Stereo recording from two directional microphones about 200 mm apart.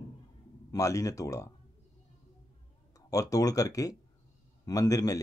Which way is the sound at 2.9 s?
15° left (ahead or behind).